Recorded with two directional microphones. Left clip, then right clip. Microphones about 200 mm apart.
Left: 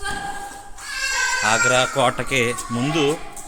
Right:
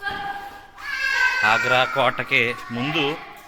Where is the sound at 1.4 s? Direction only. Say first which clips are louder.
Left 3 dB; 15° left (ahead or behind).